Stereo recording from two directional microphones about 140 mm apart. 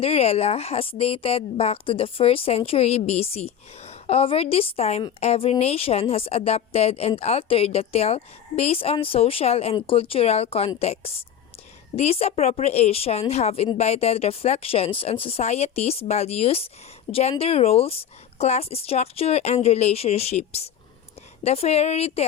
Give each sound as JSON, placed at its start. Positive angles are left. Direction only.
{"t": 0.0, "sound": "speech", "side_deg": 45}